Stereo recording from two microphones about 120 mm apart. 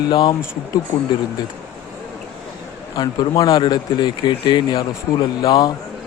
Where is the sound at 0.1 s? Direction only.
35° left (ahead or behind).